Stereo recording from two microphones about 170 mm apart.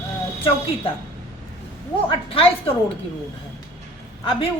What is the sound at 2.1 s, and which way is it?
Speech, 35° left (ahead or behind).